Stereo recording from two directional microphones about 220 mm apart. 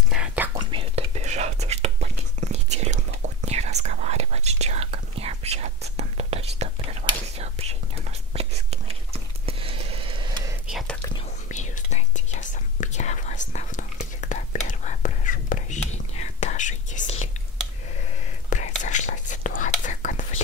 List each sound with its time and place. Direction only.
0.1 s whispering: 5° right (ahead or behind)
0.6 s whispering: 20° right (ahead or behind)
10.7 s whispering: centre (ahead or behind)
11.1 s whispering: 30° left (ahead or behind)
18.5 s whispering: 35° left (ahead or behind)